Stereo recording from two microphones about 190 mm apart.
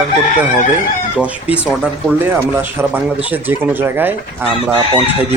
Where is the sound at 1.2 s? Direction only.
5° right (ahead or behind).